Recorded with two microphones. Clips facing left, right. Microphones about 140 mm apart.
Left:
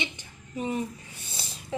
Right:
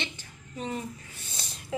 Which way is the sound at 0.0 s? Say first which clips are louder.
Left 2 dB; 10° left (ahead or behind).